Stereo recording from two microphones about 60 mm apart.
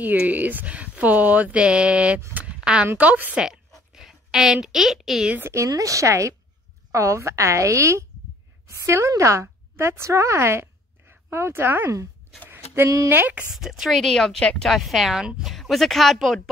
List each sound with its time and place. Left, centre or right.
0.0 s speech: right
2.3 s a sound: centre
3.0 s speech: right
3.9 s a woman's voice: centre
5.4 s a woman's voice: right
5.7 s a woman's voice: right
12.4 s a sound: right
13.5 s speech: centre
14.7 s speech: centre
15.5 s speech: centre